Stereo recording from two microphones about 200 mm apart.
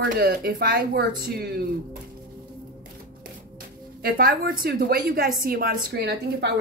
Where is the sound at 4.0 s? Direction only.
50° right (ahead or behind).